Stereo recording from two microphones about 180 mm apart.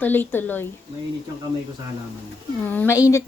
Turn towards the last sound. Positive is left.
turn(degrees=15)  # may be behind; listen again after turning